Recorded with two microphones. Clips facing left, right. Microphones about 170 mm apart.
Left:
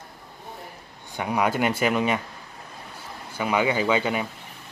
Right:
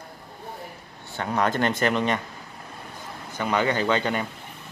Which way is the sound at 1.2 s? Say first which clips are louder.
Even; 10° left (ahead or behind).